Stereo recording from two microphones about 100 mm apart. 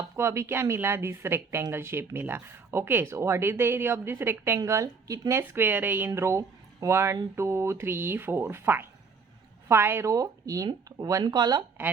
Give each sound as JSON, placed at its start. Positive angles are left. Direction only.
{"t": 0.2, "sound": "speech", "side_deg": -25}
{"t": 5.4, "sound": "speech", "side_deg": -20}
{"t": 6.1, "sound": "a woman's voice", "side_deg": -25}